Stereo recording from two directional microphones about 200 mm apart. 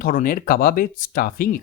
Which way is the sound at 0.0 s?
40° left (ahead or behind).